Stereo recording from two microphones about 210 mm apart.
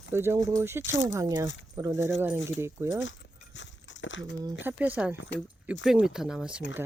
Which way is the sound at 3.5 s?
60° left (ahead or behind).